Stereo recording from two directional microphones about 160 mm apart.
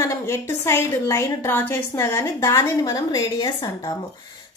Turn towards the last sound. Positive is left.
turn(degrees=25)  # may be behind; listen again after turning